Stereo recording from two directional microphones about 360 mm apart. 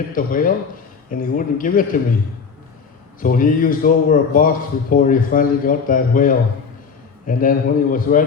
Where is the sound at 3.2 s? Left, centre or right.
Left.